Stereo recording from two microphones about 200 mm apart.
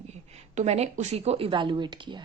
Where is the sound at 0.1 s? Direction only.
35° right (ahead or behind).